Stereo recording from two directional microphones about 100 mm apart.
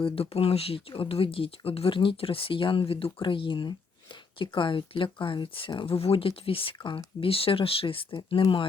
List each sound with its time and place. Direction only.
0.0 s speech: 75° left (ahead or behind); by 8.6 s 60° left (ahead or behind)